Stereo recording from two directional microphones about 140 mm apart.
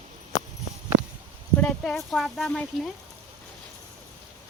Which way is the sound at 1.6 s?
5° left (ahead or behind).